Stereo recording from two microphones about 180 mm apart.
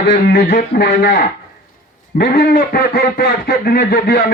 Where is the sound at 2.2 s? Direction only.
55° left (ahead or behind).